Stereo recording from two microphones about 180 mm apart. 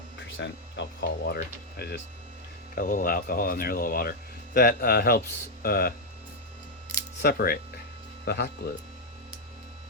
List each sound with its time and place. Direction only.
0.3 s speech: 85° left; by 5.9 s 55° left (ahead or behind)
7.2 s speech: 60° left (ahead or behind)